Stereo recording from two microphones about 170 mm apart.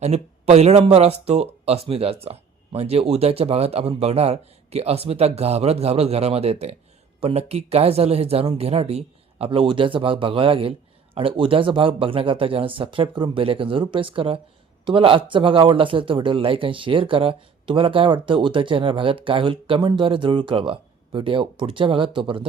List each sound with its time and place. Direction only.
0.0 s speech: 40° right (ahead or behind)